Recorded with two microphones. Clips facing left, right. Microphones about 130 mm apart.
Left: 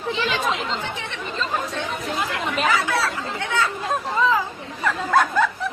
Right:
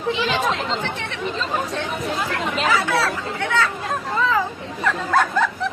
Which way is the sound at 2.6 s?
Centre (ahead or behind).